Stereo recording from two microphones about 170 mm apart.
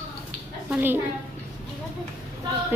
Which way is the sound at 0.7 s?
10° right (ahead or behind).